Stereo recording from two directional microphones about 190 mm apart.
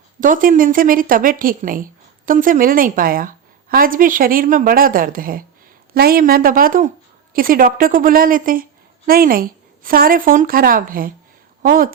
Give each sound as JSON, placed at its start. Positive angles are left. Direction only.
{"t": 0.2, "sound": "speech", "side_deg": -45}